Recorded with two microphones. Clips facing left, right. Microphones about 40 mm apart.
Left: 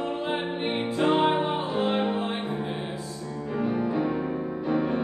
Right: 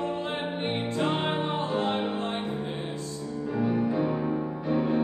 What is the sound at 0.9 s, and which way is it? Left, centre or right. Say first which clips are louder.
Music: left 7 dB; centre.